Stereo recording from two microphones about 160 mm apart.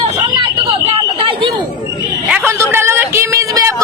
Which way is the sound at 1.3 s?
35° right (ahead or behind).